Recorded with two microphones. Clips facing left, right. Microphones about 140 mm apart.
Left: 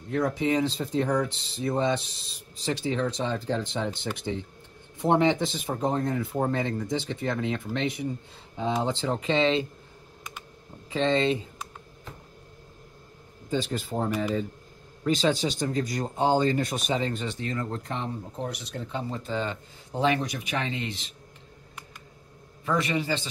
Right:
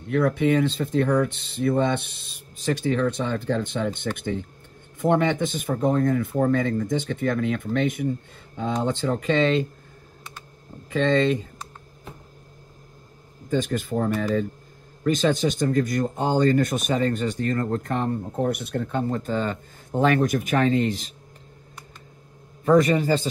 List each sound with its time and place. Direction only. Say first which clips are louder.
0.1 s speech: right 5 dB; 60° right (ahead or behind)
10.9 s speech: right 3 dB; 50° right (ahead or behind)
13.5 s speech: right 4 dB; 50° right (ahead or behind)
22.7 s speech: right 9 dB; 45° right (ahead or behind)